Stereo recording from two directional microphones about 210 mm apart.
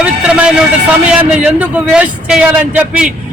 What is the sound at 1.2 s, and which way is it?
A man's voice, 5° right (ahead or behind).